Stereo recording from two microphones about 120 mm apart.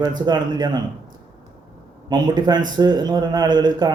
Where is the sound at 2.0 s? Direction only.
35° right (ahead or behind).